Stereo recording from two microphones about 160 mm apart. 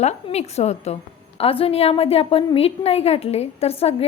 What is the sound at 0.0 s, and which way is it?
A woman's voice, 45° left (ahead or behind).